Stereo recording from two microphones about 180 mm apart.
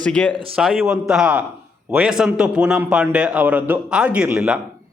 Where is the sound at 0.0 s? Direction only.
5° left (ahead or behind).